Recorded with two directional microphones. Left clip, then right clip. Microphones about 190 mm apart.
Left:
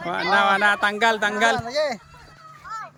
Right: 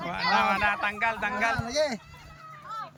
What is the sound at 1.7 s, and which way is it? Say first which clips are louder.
Speech: left 4 dB; 20° left (ahead or behind).